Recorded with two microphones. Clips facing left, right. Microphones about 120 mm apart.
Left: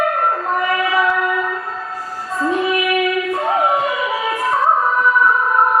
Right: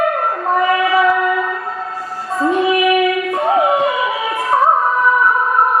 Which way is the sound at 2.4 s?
25° right (ahead or behind).